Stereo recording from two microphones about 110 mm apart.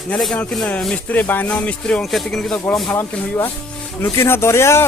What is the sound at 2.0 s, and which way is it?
Music, centre (ahead or behind).